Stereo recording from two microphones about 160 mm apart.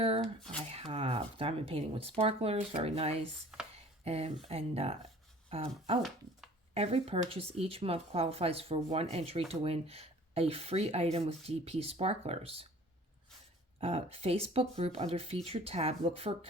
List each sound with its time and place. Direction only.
0.0 s speech: 35° right (ahead or behind)
13.7 s speech: 35° right (ahead or behind)